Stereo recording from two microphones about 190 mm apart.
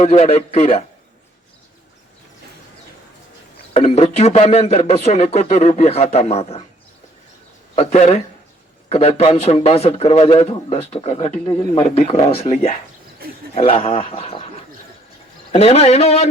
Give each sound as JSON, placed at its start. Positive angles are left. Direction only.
{"t": 0.0, "sound": "speech", "side_deg": 35}
{"t": 3.8, "sound": "speech", "side_deg": 30}
{"t": 7.8, "sound": "speech", "side_deg": 35}
{"t": 13.2, "sound": "speech", "side_deg": -55}
{"t": 13.6, "sound": "speech", "side_deg": 30}
{"t": 15.5, "sound": "speech", "side_deg": 35}